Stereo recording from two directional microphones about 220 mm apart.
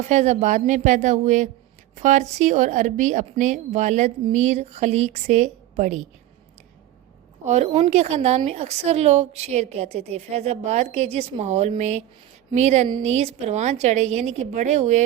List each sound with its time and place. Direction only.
0.0 s a woman's voice: 30° right (ahead or behind)
7.4 s a woman's voice: 30° right (ahead or behind)